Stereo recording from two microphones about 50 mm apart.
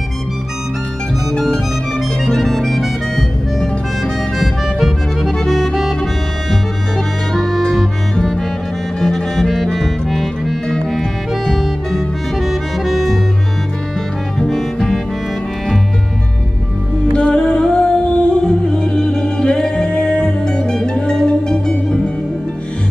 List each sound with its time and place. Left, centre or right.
2.2 s music: centre
4.4 s accordion: centre
7.3 s music: centre
14.4 s music: centre
17.1 s music: centre